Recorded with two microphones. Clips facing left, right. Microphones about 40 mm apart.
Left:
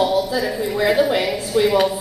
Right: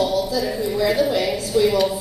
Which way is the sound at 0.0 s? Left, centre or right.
Left.